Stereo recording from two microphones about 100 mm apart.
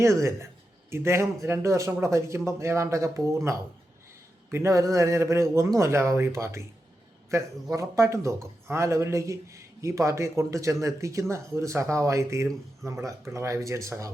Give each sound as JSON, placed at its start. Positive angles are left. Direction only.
{"t": 0.0, "sound": "speech", "side_deg": -30}